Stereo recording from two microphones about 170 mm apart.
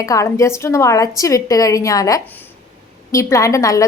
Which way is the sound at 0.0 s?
20° left (ahead or behind).